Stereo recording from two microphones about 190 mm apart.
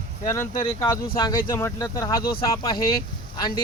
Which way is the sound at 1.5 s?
15° left (ahead or behind).